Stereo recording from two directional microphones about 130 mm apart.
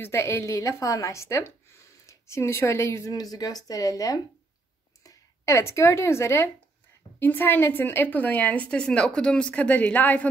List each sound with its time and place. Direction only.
0.0 s a woman's voice: 20° left (ahead or behind)